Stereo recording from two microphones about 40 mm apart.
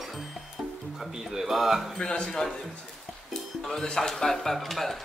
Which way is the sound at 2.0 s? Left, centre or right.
Centre.